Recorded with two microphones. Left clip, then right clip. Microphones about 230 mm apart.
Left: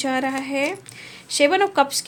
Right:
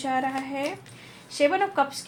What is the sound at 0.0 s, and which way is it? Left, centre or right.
Speech, left.